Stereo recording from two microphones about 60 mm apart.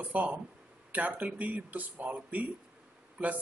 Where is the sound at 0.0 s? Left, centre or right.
Right.